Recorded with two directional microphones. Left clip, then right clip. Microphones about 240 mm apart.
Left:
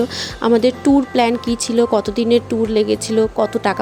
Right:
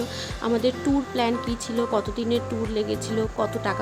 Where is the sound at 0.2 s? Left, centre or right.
Left.